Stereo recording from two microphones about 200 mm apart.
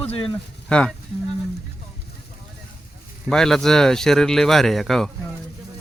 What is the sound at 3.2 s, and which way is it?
Speech, centre (ahead or behind).